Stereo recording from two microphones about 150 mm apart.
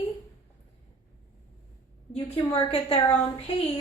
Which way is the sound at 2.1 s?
35° left (ahead or behind).